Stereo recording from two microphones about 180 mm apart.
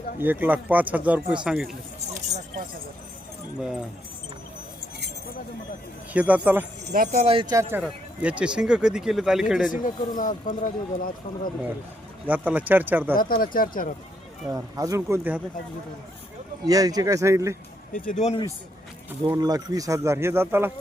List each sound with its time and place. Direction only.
0.2 s speech: 10° right (ahead or behind)
3.6 s speech: 5° right (ahead or behind)
6.1 s speech: 10° right (ahead or behind)
6.9 s speech: 45° right (ahead or behind)
7.5 s speech: 15° right (ahead or behind)
10.2 s speech: 45° left (ahead or behind)
12.2 s speech: 10° right (ahead or behind)
13.1 s speech: 55° left (ahead or behind)
14.5 s speech: 20° right (ahead or behind)
16.6 s speech: 20° right (ahead or behind)
17.9 s speech: 45° left (ahead or behind)
19.3 s speech: 20° right (ahead or behind)